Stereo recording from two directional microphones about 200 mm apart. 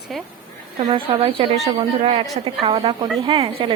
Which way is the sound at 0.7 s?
25° right (ahead or behind).